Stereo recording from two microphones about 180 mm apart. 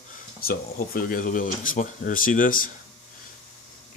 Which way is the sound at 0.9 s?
50° left (ahead or behind).